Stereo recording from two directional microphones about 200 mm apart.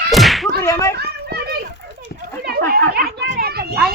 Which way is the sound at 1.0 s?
55° right (ahead or behind).